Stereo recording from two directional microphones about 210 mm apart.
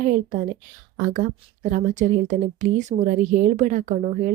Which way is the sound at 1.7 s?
35° right (ahead or behind).